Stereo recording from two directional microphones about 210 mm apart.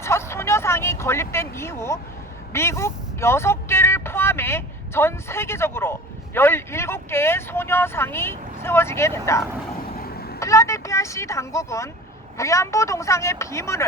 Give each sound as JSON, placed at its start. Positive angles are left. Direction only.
{"t": 0.0, "sound": "vehicle", "side_deg": 10}
{"t": 2.5, "sound": "speech", "side_deg": 10}
{"t": 9.9, "sound": "vehicle", "side_deg": 45}
{"t": 10.4, "sound": "speech", "side_deg": 15}